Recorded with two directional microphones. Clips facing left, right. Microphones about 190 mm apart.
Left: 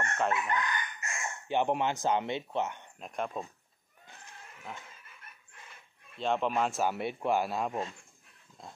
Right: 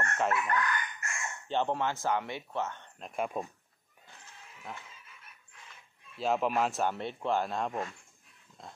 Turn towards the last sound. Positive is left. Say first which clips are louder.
# left 1 dB
turn(degrees=5)  # may be behind; listen again after turning